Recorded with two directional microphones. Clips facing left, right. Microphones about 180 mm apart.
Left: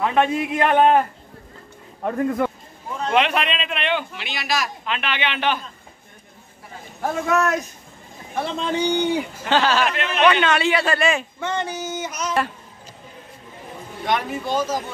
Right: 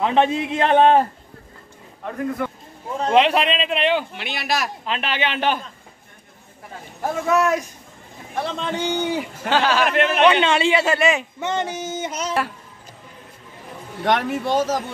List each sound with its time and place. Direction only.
0.0 s a man's voice: 25° right (ahead or behind)
3.0 s a man's voice: 30° right (ahead or behind)
4.2 s speech: 55° right (ahead or behind)
4.8 s a man's voice: 35° right (ahead or behind)
7.0 s a man's voice: 10° right (ahead or behind)
9.8 s a man's voice: 55° right (ahead or behind)
10.2 s a man's voice: 25° right (ahead or behind)
14.0 s a man's voice: 75° right (ahead or behind)